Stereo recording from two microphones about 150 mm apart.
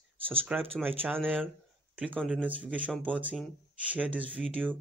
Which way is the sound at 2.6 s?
10° right (ahead or behind).